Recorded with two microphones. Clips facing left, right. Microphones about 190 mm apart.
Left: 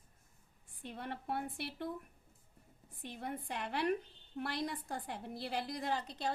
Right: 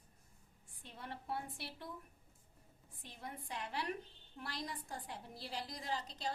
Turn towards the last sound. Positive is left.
turn(degrees=60)  # may be behind; listen again after turning